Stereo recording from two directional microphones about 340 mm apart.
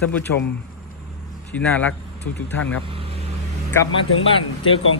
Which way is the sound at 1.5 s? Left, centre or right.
Centre.